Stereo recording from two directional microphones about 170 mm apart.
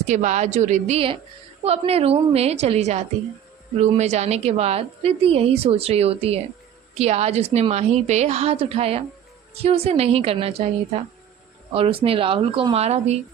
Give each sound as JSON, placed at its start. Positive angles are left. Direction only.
{"t": 0.1, "sound": "a woman's voice", "side_deg": -45}
{"t": 11.7, "sound": "a woman's voice", "side_deg": -35}